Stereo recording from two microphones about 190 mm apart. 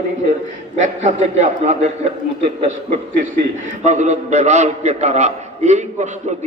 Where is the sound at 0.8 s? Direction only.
40° right (ahead or behind).